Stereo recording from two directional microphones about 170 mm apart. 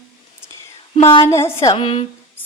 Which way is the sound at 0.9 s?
35° left (ahead or behind).